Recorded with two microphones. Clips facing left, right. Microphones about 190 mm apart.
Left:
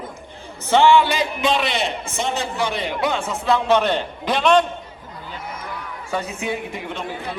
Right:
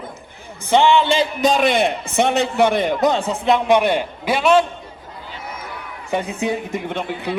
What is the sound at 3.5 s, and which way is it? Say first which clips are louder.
A man's voice: right 2 dB; 15° right (ahead or behind).